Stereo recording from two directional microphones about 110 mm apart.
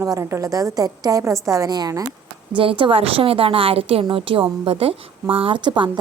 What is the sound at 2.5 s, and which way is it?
A woman's voice, 50° right (ahead or behind).